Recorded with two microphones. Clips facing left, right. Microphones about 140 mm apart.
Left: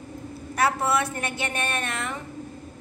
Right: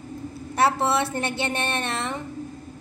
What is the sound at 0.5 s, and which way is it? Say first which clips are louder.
A woman's voice: right 2 dB; 30° right (ahead or behind).